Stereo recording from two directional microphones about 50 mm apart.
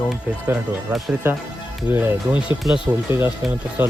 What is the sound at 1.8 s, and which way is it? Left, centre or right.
Speech, right.